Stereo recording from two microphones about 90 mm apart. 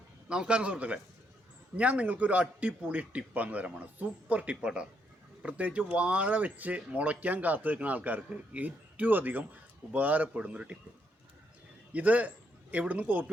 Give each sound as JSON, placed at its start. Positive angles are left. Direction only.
{"t": 0.3, "sound": "speech", "side_deg": -10}
{"t": 11.9, "sound": "speech", "side_deg": -15}